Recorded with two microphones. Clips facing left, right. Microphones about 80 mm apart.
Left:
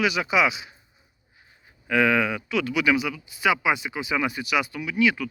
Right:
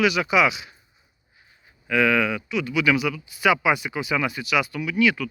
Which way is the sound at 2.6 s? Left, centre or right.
Left.